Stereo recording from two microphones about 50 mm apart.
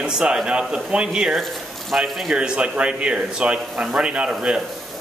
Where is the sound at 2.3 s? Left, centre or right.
Centre.